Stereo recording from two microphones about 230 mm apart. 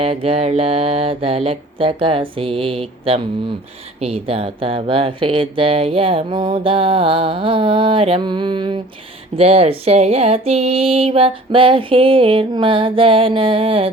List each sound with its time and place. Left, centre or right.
0.0 s speech: right